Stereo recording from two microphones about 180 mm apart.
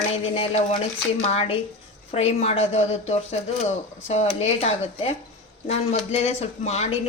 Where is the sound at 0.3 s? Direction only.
35° left (ahead or behind).